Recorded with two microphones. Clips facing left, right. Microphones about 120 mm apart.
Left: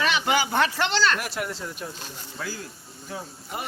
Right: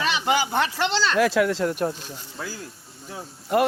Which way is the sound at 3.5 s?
85° right.